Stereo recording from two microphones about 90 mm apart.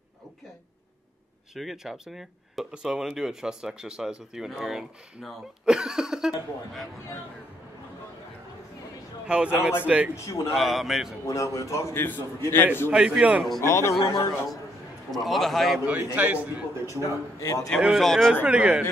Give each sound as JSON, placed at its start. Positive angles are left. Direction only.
{"t": 1.5, "sound": "speech", "side_deg": -5}
{"t": 9.3, "sound": "a man's voice", "side_deg": -15}
{"t": 10.1, "sound": "a man's voice", "side_deg": 35}
{"t": 10.5, "sound": "speech", "side_deg": 0}
{"t": 11.2, "sound": "a man's voice", "side_deg": 35}
{"t": 12.9, "sound": "a man's voice", "side_deg": -10}
{"t": 13.6, "sound": "a man's voice", "side_deg": 30}
{"t": 15.0, "sound": "speech", "side_deg": 0}
{"t": 15.8, "sound": "a man's voice", "side_deg": -20}
{"t": 16.8, "sound": "a man's voice", "side_deg": 35}
{"t": 17.7, "sound": "speech", "side_deg": 0}
{"t": 18.3, "sound": "a man's voice", "side_deg": -10}